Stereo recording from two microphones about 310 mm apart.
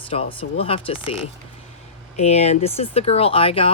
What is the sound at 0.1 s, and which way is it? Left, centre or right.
Speech, centre.